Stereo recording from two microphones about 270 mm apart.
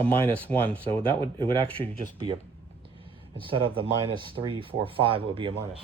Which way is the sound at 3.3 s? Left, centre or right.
Centre.